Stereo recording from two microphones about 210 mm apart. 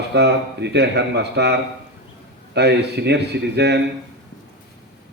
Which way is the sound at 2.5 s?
50° right (ahead or behind).